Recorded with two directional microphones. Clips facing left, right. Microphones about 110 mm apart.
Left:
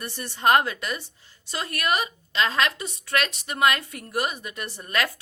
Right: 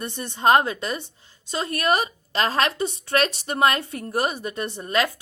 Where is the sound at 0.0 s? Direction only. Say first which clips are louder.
Right 2 dB; 20° right (ahead or behind).